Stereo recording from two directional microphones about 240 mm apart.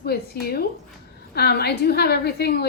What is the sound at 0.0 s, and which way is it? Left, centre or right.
A woman's voice, left.